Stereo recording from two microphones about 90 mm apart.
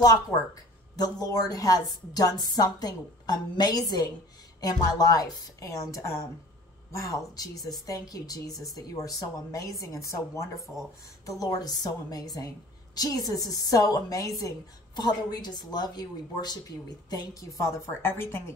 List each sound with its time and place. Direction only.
0.9 s a woman's voice: 45° left (ahead or behind)
15.0 s a woman's voice: 50° left (ahead or behind)
18.0 s speech: 25° left (ahead or behind)